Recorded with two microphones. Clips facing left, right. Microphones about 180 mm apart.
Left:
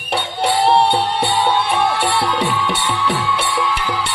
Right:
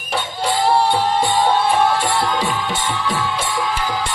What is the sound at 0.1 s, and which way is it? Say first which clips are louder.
Music: left 3 dB; 60° left (ahead or behind).